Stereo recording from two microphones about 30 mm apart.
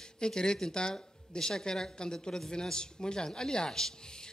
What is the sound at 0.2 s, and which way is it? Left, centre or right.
Speech, left.